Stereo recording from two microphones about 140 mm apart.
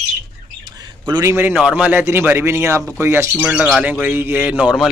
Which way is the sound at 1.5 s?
5° right (ahead or behind).